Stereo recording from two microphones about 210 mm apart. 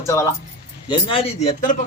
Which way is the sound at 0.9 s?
25° left (ahead or behind).